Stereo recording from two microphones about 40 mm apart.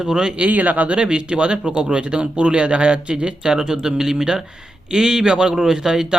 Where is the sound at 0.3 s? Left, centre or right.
Right.